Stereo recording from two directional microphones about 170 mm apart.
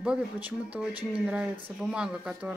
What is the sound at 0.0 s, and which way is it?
Speech, 5° right (ahead or behind).